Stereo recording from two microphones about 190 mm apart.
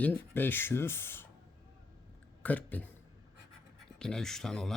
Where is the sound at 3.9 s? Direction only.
5° left (ahead or behind).